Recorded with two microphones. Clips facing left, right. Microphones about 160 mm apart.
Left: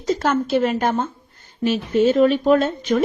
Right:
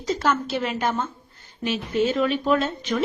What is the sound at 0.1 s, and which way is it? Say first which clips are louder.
Speech: left 5 dB; 45° left (ahead or behind).